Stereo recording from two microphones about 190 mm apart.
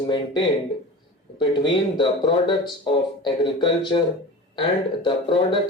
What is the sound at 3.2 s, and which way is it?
Speech, 25° left (ahead or behind).